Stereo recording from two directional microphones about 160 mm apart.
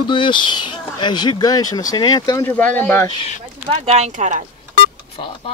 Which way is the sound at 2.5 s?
10° left (ahead or behind).